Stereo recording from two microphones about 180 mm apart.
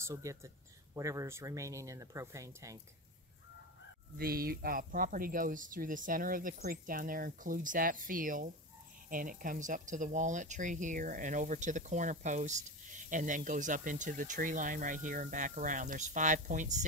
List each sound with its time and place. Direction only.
0.0 s speech: 15° right (ahead or behind)
4.2 s speech: 55° right (ahead or behind)